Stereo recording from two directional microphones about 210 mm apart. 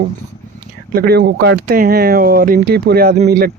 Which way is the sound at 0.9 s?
50° right (ahead or behind).